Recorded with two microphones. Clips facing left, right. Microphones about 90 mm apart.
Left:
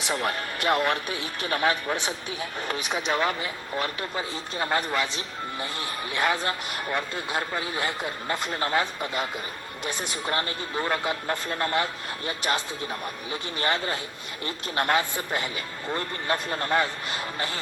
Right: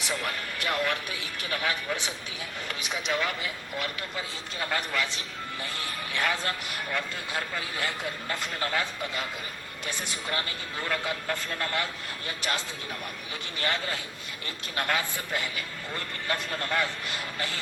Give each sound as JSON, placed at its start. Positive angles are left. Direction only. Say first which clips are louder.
{"t": 0.1, "sound": "speech", "louder": "left 5 dB", "side_deg": 35}
{"t": 6.1, "sound": "speech", "louder": "left 4 dB", "side_deg": 20}
{"t": 13.6, "sound": "speech", "louder": "left 3 dB", "side_deg": 25}